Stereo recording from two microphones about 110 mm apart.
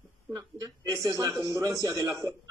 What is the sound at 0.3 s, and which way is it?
A woman's voice, 35° right (ahead or behind).